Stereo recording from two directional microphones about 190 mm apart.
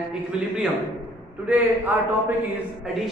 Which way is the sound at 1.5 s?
10° right (ahead or behind).